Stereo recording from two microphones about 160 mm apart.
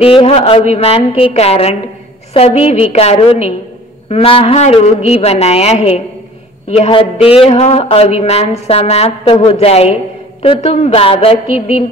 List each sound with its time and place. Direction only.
0.0 s speech: 35° left (ahead or behind)